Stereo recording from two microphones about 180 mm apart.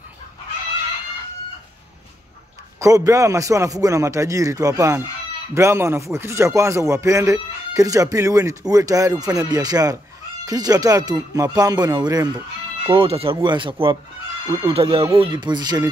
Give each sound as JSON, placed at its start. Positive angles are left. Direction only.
{"t": 2.8, "sound": "a man's voice", "side_deg": -20}